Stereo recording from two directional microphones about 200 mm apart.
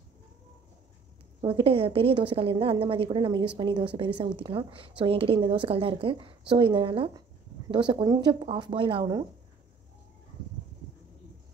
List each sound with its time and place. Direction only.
1.4 s a woman's voice: 30° right (ahead or behind)